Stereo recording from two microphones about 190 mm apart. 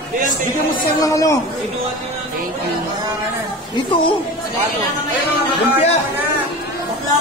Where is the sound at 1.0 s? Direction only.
15° left (ahead or behind).